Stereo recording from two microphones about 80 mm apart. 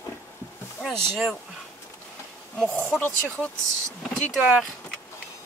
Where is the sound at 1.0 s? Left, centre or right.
Centre.